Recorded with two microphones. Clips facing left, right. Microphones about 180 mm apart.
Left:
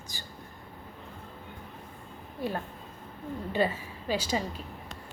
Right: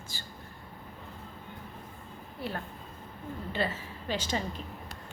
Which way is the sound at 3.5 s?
15° left (ahead or behind).